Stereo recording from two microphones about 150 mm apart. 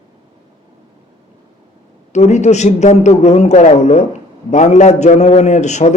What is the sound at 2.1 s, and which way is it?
A man's voice, 50° left (ahead or behind).